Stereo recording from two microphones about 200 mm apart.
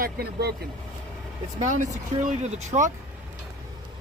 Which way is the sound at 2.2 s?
35° right (ahead or behind).